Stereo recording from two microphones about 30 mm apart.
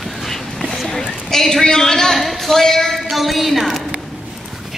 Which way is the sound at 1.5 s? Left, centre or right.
Left.